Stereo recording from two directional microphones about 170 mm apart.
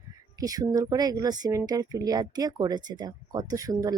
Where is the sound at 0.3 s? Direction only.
20° right (ahead or behind).